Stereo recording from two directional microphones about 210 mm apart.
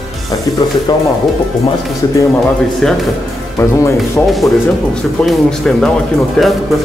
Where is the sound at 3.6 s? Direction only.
15° left (ahead or behind).